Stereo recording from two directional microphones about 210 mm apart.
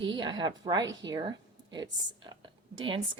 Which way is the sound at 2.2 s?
20° right (ahead or behind).